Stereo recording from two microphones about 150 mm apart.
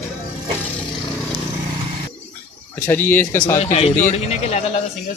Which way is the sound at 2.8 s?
15° left (ahead or behind).